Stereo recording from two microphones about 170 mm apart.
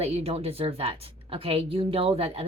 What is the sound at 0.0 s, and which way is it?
A woman's voice, 35° right (ahead or behind).